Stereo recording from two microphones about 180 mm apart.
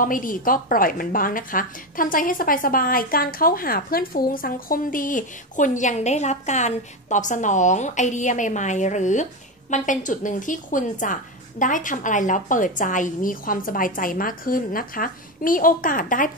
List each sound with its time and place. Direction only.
0.0 s a woman's voice: 50° left (ahead or behind)